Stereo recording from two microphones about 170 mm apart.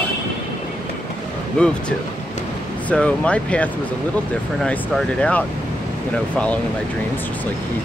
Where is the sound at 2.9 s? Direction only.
10° left (ahead or behind).